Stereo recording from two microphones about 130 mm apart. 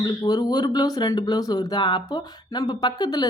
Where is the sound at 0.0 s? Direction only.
30° left (ahead or behind).